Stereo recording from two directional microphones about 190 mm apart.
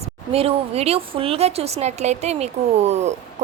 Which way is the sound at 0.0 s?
30° right (ahead or behind).